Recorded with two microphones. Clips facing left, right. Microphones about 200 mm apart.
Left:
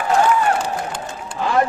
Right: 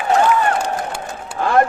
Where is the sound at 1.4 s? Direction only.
55° right (ahead or behind).